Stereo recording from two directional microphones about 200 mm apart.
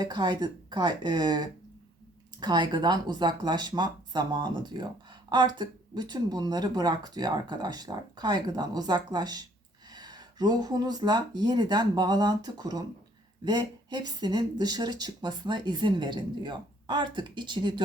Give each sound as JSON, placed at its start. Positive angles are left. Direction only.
{"t": 0.0, "sound": "speech", "side_deg": -20}